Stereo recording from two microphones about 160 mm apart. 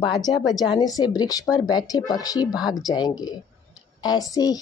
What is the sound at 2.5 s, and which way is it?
Speech, centre (ahead or behind).